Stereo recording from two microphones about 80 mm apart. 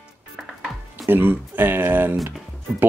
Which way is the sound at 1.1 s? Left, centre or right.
Right.